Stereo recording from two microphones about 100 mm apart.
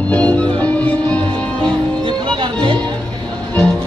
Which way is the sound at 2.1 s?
55° right (ahead or behind).